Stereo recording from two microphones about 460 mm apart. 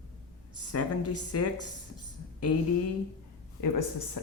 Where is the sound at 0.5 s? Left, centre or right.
Left.